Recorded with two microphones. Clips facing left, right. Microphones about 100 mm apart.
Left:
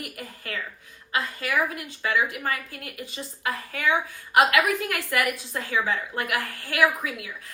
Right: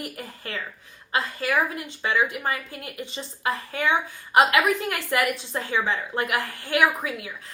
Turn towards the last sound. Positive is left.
turn(degrees=-30)  # may be behind; listen again after turning